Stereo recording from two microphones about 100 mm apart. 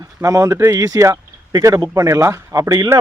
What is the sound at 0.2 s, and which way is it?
Speech, 30° right (ahead or behind).